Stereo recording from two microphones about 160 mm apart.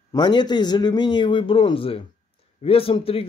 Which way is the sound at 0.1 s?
25° left (ahead or behind).